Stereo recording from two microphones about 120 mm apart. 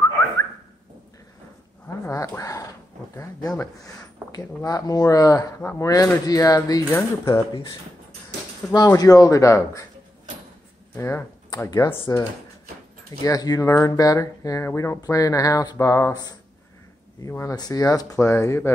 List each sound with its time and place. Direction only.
2.0 s speech: 25° left (ahead or behind)
8.7 s speech: 30° left (ahead or behind)
11.0 s speech: 25° left (ahead or behind)